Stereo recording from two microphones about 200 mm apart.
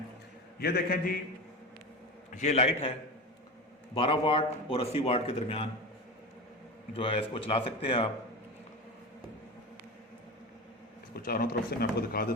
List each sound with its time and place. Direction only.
0.6 s speech: 50° left (ahead or behind)
2.3 s a man's voice: 35° left (ahead or behind)
3.9 s a man's voice: 25° left (ahead or behind)
6.9 s a man's voice: 25° left (ahead or behind)
11.1 s speech: 50° left (ahead or behind)